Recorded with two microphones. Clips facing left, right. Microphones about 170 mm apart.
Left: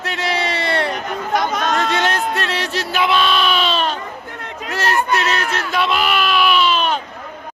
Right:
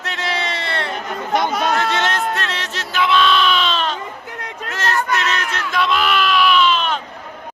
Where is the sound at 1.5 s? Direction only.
10° right (ahead or behind).